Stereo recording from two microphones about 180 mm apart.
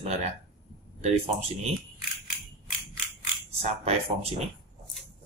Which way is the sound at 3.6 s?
35° right (ahead or behind).